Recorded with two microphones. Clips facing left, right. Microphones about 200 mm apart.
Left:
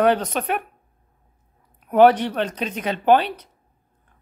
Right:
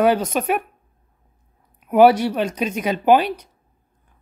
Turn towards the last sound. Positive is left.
turn(degrees=-10)  # may be behind; listen again after turning